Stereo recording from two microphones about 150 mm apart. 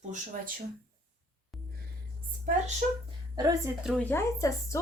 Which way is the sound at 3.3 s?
25° right (ahead or behind).